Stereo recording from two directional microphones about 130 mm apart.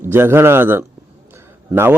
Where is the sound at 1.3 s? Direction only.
20° right (ahead or behind).